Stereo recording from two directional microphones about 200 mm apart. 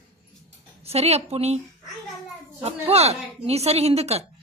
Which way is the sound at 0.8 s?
30° right (ahead or behind).